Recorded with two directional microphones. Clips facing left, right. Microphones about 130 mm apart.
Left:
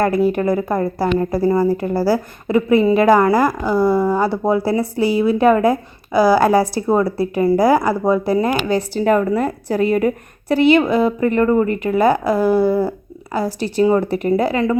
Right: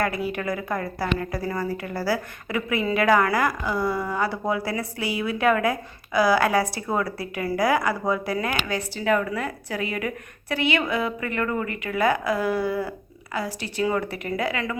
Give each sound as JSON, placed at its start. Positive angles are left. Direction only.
{"t": 0.0, "sound": "speech", "side_deg": 40}